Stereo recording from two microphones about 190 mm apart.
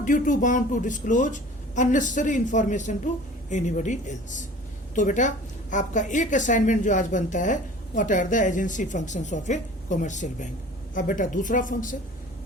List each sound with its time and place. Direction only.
0.0 s a woman's voice: 45° left (ahead or behind)